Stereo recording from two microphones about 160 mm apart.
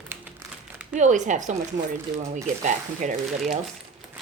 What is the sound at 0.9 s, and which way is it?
Speech, 50° right (ahead or behind).